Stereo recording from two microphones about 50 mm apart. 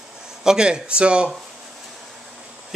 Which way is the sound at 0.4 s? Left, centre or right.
Centre.